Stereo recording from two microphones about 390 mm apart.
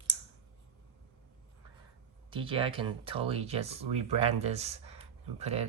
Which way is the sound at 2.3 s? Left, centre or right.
Centre.